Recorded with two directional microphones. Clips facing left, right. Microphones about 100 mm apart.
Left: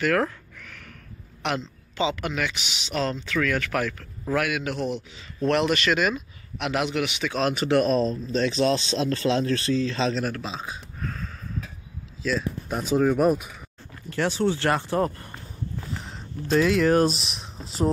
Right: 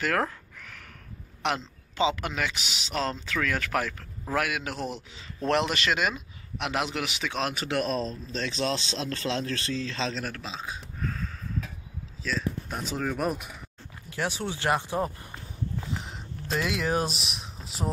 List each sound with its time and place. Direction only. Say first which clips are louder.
0.0 s a sound: left 4 dB; 25° right (ahead or behind)
1.4 s speech: left 1 dB; 25° right (ahead or behind)
7.5 s speech: left 7 dB; centre (ahead or behind)
10.6 s a sound: left 1 dB; 5° left (ahead or behind)
12.2 s speech: left 4 dB; 5° left (ahead or behind)
14.0 s speech: left 7 dB; 10° right (ahead or behind)